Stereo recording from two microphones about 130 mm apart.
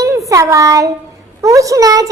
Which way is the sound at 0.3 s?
25° right (ahead or behind).